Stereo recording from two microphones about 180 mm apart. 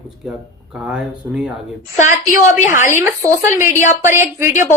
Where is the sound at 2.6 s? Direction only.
45° left (ahead or behind).